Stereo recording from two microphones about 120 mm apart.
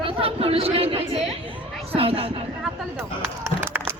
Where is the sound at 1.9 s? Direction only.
50° right (ahead or behind).